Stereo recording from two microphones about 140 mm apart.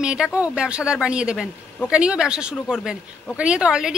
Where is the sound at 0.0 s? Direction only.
5° right (ahead or behind).